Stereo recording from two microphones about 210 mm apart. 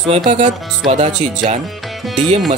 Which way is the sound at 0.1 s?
25° right (ahead or behind).